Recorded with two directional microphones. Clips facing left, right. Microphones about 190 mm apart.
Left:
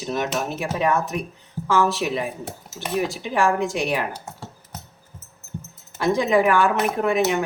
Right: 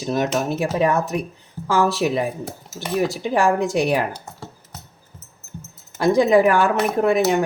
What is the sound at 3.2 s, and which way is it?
Speech, 40° right (ahead or behind).